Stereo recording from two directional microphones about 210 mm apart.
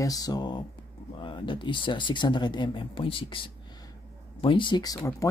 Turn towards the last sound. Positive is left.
turn(degrees=15)  # may be behind; listen again after turning